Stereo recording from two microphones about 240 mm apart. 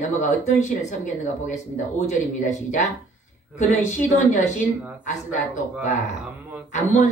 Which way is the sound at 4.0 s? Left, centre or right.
Left.